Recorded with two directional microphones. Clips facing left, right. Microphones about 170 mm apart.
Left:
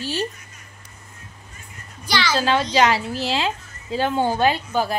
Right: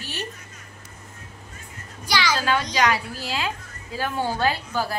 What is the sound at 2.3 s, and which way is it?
A woman's voice, 25° left (ahead or behind).